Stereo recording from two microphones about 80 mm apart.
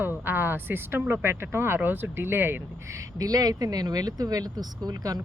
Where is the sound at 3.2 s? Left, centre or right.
Right.